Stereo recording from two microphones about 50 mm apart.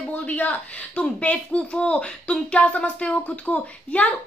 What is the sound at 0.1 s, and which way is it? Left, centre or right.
A woman's voice, left.